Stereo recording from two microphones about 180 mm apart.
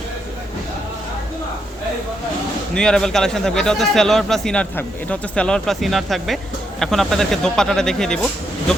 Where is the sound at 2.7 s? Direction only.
5° left (ahead or behind).